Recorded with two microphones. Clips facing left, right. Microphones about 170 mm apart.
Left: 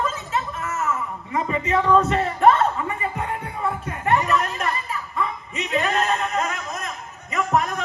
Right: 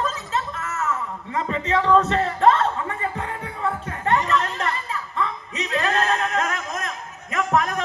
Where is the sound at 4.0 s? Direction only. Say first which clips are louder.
Left 1 dB; 15° left (ahead or behind).